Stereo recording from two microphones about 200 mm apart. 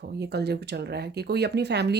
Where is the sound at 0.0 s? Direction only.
55° right (ahead or behind).